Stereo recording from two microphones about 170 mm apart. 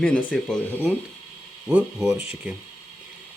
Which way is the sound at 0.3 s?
5° left (ahead or behind).